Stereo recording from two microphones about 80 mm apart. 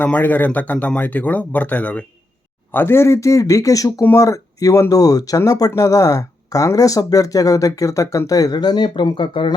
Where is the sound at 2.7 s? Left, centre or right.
Left.